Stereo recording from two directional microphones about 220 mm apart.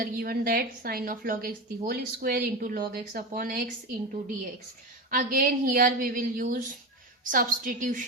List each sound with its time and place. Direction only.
0.0 s a woman's voice: 45° right (ahead or behind)
5.1 s a woman's voice: 40° right (ahead or behind)